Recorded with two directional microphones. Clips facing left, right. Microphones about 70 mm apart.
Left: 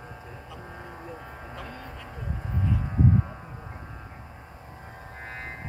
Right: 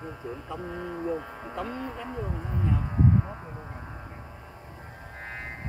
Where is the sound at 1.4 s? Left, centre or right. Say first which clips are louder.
Right 6 dB; centre.